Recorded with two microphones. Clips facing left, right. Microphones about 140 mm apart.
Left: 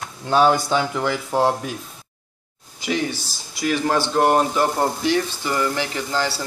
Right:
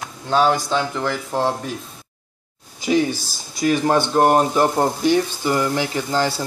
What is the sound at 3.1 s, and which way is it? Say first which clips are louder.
Speech: right 4 dB; 45° right (ahead or behind).